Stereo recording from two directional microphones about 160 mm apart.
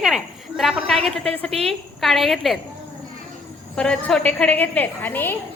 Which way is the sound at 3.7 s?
5° left (ahead or behind).